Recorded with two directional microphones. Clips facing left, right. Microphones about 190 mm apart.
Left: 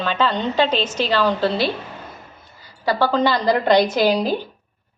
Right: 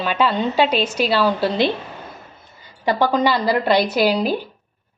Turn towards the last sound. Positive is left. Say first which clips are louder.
# even
turn(degrees=-10)  # may be behind; listen again after turning